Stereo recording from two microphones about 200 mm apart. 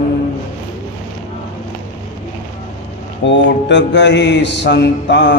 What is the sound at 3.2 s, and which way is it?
Mantra, 65° left (ahead or behind).